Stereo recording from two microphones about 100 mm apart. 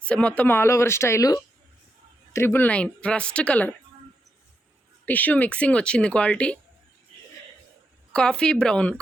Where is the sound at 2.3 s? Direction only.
20° left (ahead or behind).